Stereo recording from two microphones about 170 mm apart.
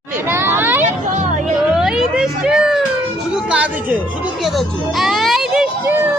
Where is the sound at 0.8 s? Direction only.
45° right (ahead or behind).